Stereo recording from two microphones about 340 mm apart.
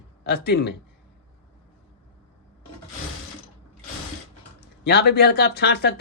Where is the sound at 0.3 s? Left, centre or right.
Left.